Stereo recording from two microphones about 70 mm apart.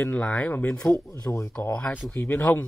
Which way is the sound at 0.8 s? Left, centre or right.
Left.